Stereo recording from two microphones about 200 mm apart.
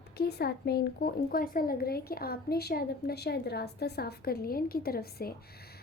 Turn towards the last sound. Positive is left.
turn(degrees=50)  # may be behind; listen again after turning